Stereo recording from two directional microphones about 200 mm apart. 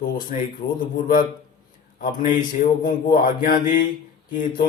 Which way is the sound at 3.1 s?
45° left (ahead or behind).